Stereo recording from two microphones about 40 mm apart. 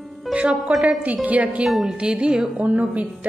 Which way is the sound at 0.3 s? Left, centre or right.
Right.